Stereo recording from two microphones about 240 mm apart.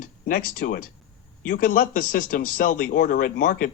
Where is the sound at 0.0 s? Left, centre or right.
Left.